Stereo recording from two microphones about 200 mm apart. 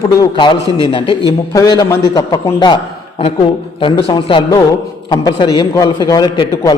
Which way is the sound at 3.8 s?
25° left (ahead or behind).